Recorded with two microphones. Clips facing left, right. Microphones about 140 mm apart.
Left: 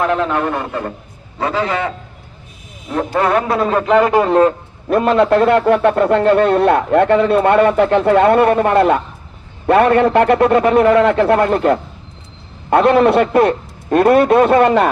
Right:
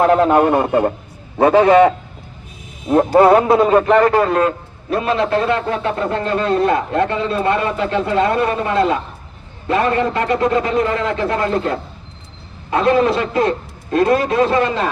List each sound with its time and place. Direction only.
0.0 s a man's voice: 40° right (ahead or behind)
1.4 s a man's voice: 55° right (ahead or behind)
2.9 s a man's voice: 35° right (ahead or behind)
3.5 s speech: 5° right (ahead or behind)
3.9 s a man's voice: 15° left (ahead or behind)
4.9 s a man's voice: 55° left (ahead or behind)
12.7 s a man's voice: 65° left (ahead or behind)